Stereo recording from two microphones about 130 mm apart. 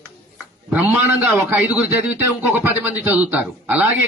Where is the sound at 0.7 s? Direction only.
15° right (ahead or behind).